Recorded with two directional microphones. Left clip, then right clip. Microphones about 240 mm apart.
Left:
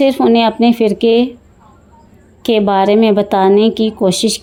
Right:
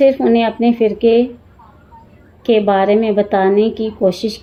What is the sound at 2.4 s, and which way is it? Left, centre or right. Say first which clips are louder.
Speech: left 1 dB; left.